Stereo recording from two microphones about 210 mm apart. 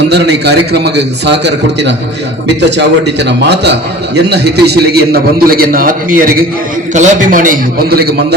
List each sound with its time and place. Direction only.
0.1 s a man's voice: 50° right (ahead or behind)